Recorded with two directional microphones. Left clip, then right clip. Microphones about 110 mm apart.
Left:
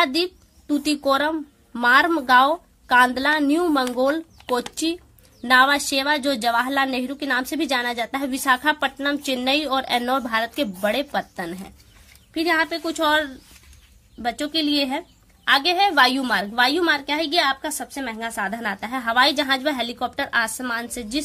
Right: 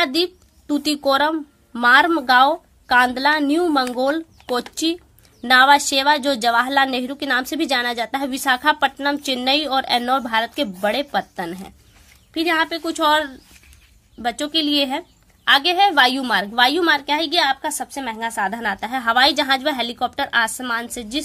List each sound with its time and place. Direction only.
0.0 s a woman's voice: 40° right (ahead or behind); by 21.2 s 25° right (ahead or behind)